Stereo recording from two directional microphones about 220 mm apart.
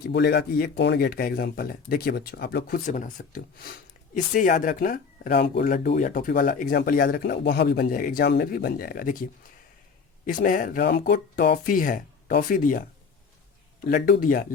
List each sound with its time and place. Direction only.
0.0 s speech: 50° left (ahead or behind)